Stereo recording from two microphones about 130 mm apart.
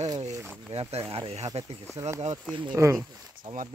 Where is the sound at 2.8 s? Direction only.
20° right (ahead or behind).